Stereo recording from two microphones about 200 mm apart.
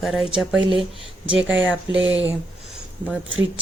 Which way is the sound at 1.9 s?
70° right (ahead or behind).